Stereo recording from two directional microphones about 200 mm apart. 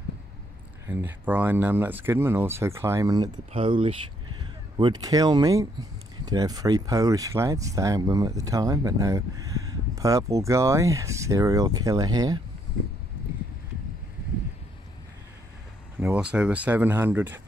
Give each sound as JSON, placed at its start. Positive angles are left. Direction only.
{"t": 0.8, "sound": "speech", "side_deg": -10}
{"t": 16.0, "sound": "speech", "side_deg": -5}